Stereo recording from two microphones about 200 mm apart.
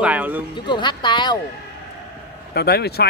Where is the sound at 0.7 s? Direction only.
25° left (ahead or behind).